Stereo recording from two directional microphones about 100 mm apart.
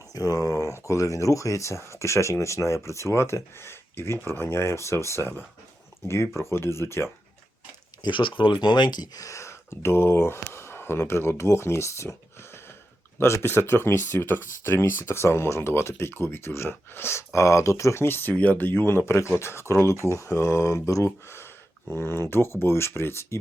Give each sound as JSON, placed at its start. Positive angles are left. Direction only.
{"t": 0.1, "sound": "speech", "side_deg": 40}
{"t": 8.0, "sound": "speech", "side_deg": 55}